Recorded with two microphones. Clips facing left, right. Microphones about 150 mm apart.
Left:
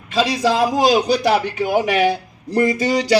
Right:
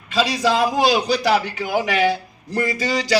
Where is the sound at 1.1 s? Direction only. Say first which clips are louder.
Left 2 dB; 20° left (ahead or behind).